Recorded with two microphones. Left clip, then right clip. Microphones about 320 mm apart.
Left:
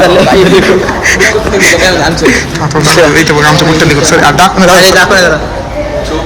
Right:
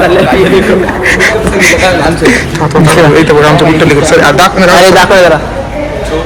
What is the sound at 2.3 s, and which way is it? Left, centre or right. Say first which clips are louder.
A man's voice: right 1 dB; centre.